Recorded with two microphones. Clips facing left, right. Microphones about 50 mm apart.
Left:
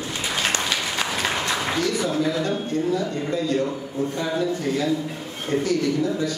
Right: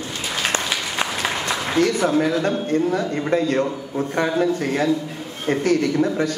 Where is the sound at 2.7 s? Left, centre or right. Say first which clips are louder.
Right 3 dB; right.